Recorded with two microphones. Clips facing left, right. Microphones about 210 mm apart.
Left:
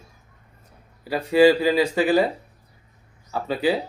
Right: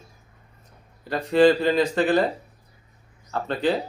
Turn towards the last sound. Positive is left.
turn(degrees=5)  # may be behind; listen again after turning